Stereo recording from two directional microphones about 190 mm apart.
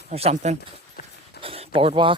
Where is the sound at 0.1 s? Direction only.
30° right (ahead or behind).